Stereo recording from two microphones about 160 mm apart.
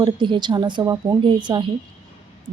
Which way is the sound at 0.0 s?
30° right (ahead or behind).